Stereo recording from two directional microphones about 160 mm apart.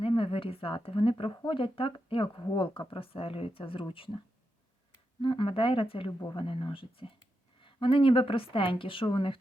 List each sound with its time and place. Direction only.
0.0 s a woman's voice: 35° left (ahead or behind)
5.2 s speech: 30° left (ahead or behind)